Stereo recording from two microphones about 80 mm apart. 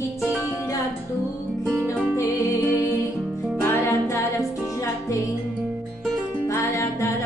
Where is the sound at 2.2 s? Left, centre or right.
Left.